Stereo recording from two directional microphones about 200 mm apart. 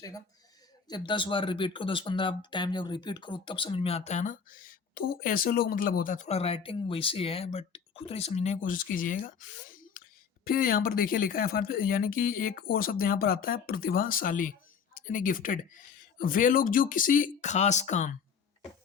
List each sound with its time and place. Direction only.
0.9 s speech: 20° left (ahead or behind)